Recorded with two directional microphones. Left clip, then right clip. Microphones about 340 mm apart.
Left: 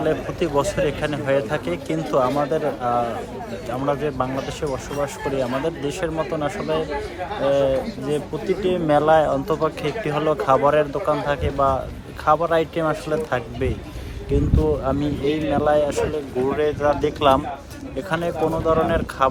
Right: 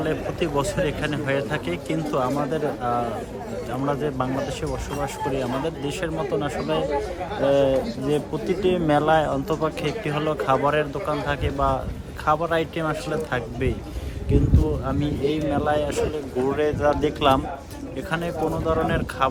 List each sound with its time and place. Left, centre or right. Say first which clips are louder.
0.0 s speech: left 3 dB; centre
14.8 s speech: left 3 dB; centre